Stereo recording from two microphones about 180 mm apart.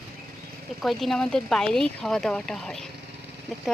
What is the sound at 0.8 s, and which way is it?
Speech, centre (ahead or behind).